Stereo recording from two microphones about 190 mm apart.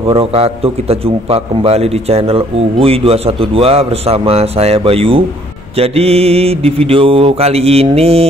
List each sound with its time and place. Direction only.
0.1 s a man's voice: 30° right (ahead or behind)